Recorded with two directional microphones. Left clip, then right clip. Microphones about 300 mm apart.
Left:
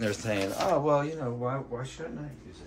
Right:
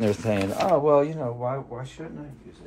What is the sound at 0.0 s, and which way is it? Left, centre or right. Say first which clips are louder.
Speech: right 5 dB; centre.